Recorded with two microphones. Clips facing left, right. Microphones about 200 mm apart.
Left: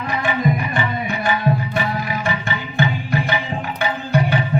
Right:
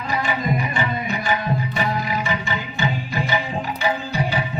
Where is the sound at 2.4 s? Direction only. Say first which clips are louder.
Left 3 dB; 55° left (ahead or behind).